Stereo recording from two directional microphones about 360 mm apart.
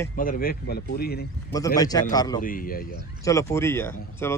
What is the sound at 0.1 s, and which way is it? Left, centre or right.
Speech, left.